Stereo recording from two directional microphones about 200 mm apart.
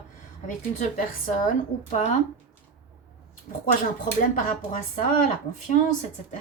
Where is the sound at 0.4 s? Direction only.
40° left (ahead or behind).